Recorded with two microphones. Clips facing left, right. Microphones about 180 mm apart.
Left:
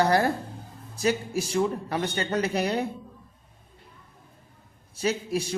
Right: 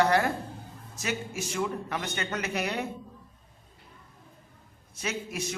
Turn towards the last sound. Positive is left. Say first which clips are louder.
# left 7 dB
turn(degrees=35)  # may be behind; listen again after turning